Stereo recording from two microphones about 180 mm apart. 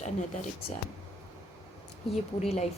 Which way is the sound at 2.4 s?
35° left (ahead or behind).